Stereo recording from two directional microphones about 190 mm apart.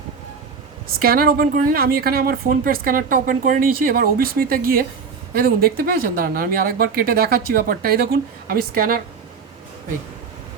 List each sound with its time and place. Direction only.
0.9 s speech: 50° right (ahead or behind)